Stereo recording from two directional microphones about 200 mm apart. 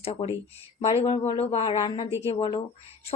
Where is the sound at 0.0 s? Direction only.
30° left (ahead or behind).